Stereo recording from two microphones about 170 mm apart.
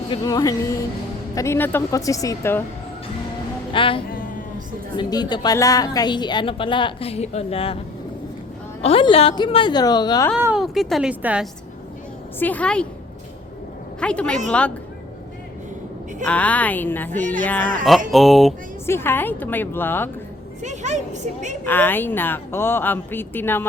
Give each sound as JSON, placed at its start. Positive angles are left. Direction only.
{"t": 0.1, "sound": "a woman's voice", "side_deg": 25}
{"t": 3.7, "sound": "music", "side_deg": 30}
{"t": 4.1, "sound": "a sound", "side_deg": 55}
{"t": 4.9, "sound": "a woman's voice", "side_deg": 25}
{"t": 8.8, "sound": "a woman's voice", "side_deg": 35}
{"t": 10.3, "sound": "speech", "side_deg": -5}
{"t": 12.4, "sound": "a woman's voice", "side_deg": 10}
{"t": 14.0, "sound": "speech", "side_deg": 5}
{"t": 16.2, "sound": "a woman's voice", "side_deg": 10}
{"t": 18.1, "sound": "speech", "side_deg": 0}
{"t": 18.9, "sound": "a woman's voice", "side_deg": 15}
{"t": 20.6, "sound": "speech", "side_deg": -45}
{"t": 21.6, "sound": "a woman's voice", "side_deg": 10}